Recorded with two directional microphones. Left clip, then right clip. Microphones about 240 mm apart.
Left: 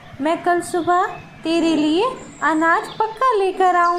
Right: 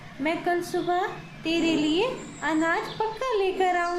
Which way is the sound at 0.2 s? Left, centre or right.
Centre.